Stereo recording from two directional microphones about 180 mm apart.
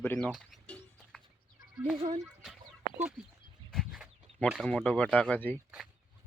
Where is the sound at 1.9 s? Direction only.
25° right (ahead or behind).